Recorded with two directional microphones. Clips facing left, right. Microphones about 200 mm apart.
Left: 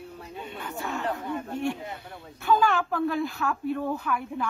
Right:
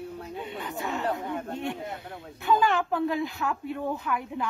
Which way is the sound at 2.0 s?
20° right (ahead or behind).